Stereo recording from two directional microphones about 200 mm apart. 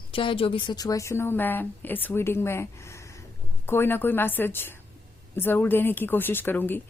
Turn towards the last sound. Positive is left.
turn(degrees=10)  # may be behind; listen again after turning